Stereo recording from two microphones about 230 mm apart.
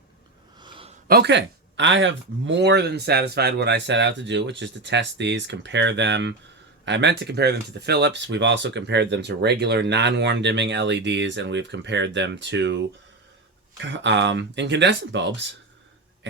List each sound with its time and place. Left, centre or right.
0.6 s a sound: right
1.0 s speech: right
13.8 s speech: right